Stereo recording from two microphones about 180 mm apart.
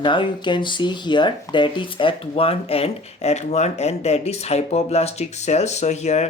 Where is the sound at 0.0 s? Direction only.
25° left (ahead or behind).